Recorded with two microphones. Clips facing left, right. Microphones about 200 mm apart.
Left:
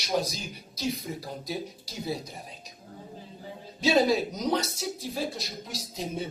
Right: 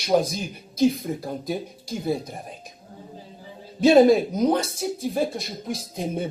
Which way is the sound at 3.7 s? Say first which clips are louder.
Right 9 dB; 55° right (ahead or behind).